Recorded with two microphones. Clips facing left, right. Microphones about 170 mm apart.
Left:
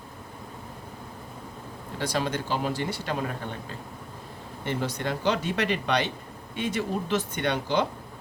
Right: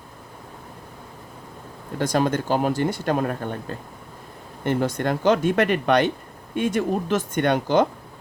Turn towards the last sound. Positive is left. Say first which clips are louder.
# right 7 dB
turn(degrees=-50)  # may be behind; listen again after turning